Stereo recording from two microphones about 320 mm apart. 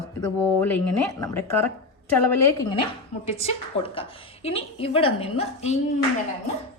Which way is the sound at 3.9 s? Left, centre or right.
Centre.